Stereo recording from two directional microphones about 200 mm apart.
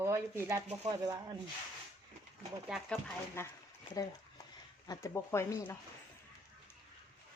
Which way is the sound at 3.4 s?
10° left (ahead or behind).